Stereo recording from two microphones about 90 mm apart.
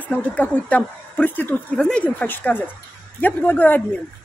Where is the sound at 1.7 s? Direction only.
10° left (ahead or behind).